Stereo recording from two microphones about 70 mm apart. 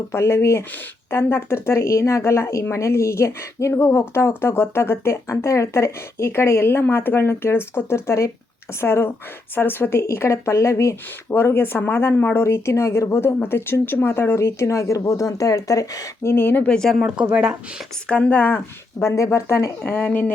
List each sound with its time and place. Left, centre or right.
0.1 s speech: left
10.0 s speech: left
11.3 s speech: left
16.2 s speech: left
16.6 s speech: centre
17.3 s speech: centre
18.1 s speech: left